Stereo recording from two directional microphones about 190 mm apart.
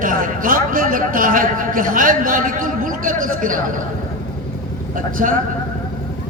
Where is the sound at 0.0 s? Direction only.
45° right (ahead or behind).